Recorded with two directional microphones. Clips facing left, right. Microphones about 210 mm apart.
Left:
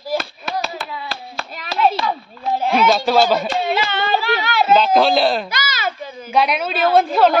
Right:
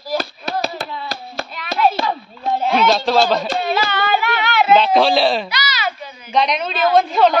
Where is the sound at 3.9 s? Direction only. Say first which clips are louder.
Even; 25° left (ahead or behind).